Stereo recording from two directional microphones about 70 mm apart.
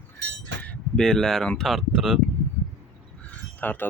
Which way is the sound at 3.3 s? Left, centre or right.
Left.